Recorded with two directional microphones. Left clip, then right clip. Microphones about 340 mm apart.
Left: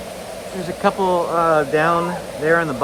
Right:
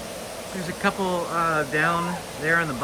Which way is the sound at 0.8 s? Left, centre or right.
Centre.